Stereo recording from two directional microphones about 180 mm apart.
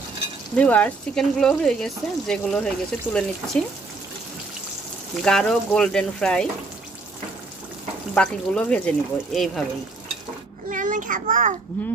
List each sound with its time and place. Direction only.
0.6 s speech: 10° left (ahead or behind)
5.2 s speech: 5° left (ahead or behind)
8.1 s speech: 5° left (ahead or behind)
10.7 s a child's voice: 45° right (ahead or behind)